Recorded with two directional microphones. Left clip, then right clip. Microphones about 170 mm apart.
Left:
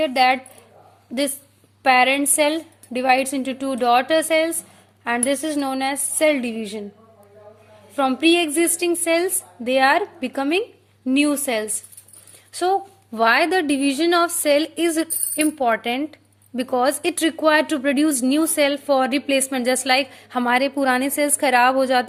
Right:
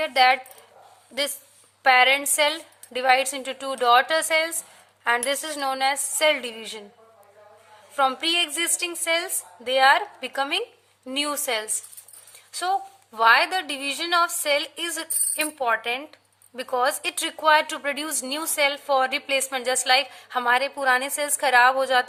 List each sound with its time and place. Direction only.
0.0 s a woman's voice: 10° left (ahead or behind)
1.8 s a woman's voice: 15° left (ahead or behind)
7.9 s a woman's voice: 15° left (ahead or behind)